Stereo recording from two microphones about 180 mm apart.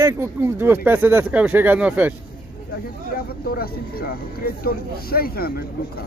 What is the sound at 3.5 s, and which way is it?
Speech, 55° left (ahead or behind).